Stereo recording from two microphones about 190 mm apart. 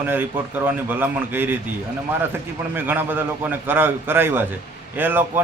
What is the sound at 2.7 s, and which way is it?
Speech, 10° right (ahead or behind).